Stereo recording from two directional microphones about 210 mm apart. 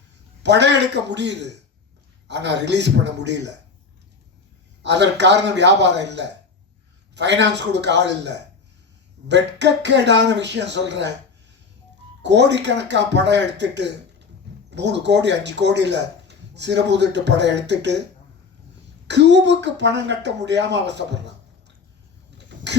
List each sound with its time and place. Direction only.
0.4 s speech: 55° right (ahead or behind)
4.8 s speech: 55° right (ahead or behind)
12.2 s speech: 55° right (ahead or behind)
19.0 s speech: 55° right (ahead or behind)